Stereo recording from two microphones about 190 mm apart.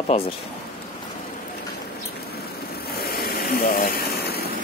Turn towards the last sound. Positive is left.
turn(degrees=55)  # may be behind; listen again after turning